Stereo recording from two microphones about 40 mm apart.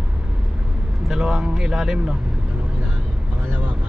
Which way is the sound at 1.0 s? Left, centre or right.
Centre.